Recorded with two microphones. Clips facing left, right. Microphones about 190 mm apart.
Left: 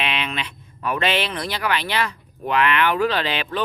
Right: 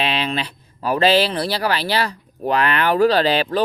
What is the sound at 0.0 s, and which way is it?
Speech, 35° right (ahead or behind).